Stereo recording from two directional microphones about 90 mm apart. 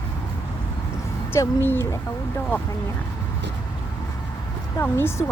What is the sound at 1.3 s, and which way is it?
Speech, 25° left (ahead or behind).